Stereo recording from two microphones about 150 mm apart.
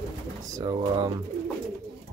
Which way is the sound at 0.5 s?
25° right (ahead or behind).